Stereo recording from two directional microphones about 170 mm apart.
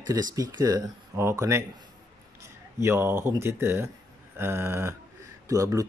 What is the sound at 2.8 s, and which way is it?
A man's voice, 15° right (ahead or behind).